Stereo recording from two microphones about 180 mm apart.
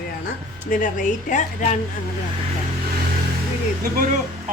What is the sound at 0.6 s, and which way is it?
A woman's voice, 50° left (ahead or behind).